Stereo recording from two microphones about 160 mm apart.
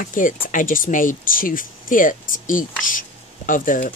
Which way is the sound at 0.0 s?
55° left (ahead or behind).